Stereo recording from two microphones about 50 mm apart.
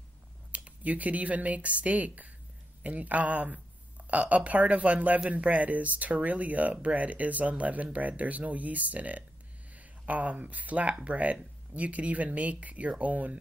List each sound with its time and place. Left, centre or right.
0.5 s speech: right